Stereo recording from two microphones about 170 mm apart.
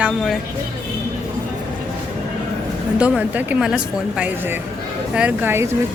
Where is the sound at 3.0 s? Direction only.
5° right (ahead or behind).